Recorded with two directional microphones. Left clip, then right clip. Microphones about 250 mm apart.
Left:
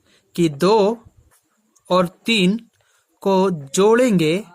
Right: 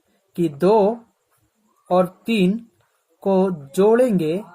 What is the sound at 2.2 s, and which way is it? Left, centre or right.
Speech, left.